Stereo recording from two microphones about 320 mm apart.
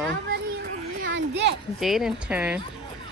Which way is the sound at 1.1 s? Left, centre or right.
Right.